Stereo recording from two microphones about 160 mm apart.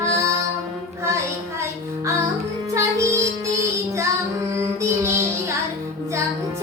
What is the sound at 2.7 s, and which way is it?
Music, 20° right (ahead or behind).